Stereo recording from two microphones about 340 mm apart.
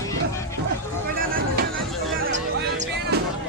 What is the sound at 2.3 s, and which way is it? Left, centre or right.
Music, right.